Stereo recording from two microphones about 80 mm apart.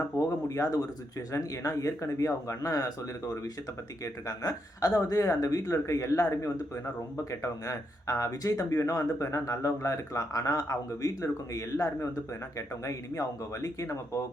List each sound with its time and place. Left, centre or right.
0.2 s speech: left
4.0 s speech: left